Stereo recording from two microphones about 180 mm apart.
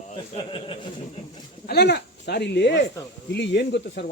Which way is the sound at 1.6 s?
65° left (ahead or behind).